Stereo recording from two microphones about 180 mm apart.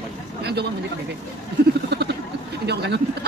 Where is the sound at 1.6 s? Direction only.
65° right (ahead or behind).